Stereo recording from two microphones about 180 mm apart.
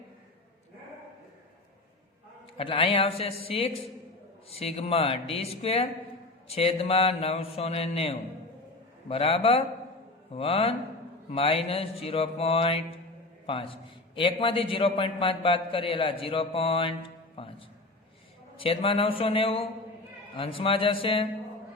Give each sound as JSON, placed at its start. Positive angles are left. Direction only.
{"t": 2.6, "sound": "mantra", "side_deg": 30}
{"t": 14.2, "sound": "a man's voice", "side_deg": 30}
{"t": 18.6, "sound": "mantra", "side_deg": 30}
{"t": 20.3, "sound": "a man's voice", "side_deg": 30}